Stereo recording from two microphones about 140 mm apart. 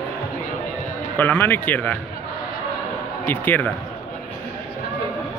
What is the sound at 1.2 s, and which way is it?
Speech, 15° left (ahead or behind).